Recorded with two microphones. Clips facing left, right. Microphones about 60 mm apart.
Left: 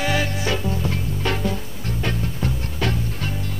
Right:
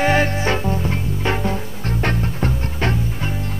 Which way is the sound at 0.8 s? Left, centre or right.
Right.